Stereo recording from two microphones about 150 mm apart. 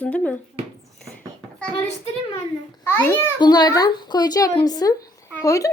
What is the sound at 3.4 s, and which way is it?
A woman's voice, 25° left (ahead or behind).